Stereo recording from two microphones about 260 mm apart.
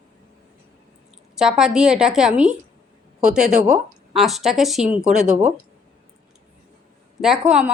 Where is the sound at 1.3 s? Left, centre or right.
Centre.